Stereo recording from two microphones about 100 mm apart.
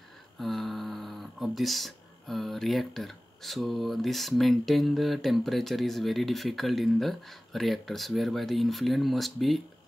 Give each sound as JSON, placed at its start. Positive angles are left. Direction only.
{"t": 0.4, "sound": "speech", "side_deg": 0}